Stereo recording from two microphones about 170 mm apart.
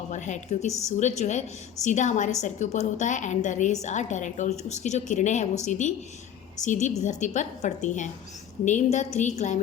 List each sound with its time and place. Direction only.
0.1 s a woman's voice: 45° left (ahead or behind)